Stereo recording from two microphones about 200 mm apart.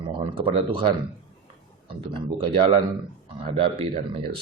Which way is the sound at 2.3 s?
25° right (ahead or behind).